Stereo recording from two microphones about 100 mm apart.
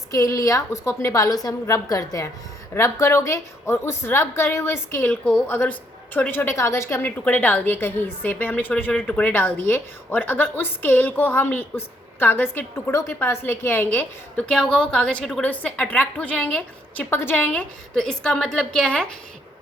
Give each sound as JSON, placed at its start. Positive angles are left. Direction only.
{"t": 0.1, "sound": "a woman's voice", "side_deg": 35}
{"t": 7.0, "sound": "a woman's voice", "side_deg": 15}